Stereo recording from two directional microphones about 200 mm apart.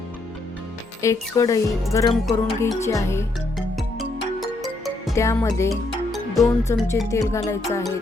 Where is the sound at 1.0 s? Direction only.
15° left (ahead or behind).